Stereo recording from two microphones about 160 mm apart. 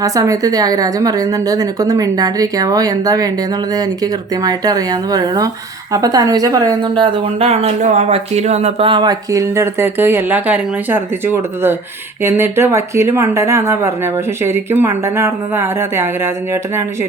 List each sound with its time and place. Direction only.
0.0 s speech: 20° right (ahead or behind)